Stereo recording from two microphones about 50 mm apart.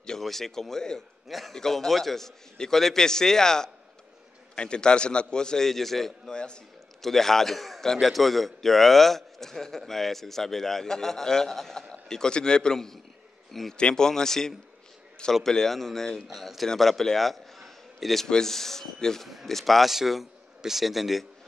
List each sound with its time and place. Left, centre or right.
0.2 s a man's voice: centre
6.3 s a man's voice: centre
7.0 s a man's voice: centre
13.7 s a man's voice: centre